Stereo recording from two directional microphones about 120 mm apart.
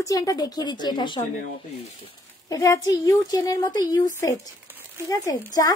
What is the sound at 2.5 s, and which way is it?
A woman's voice, 25° left (ahead or behind).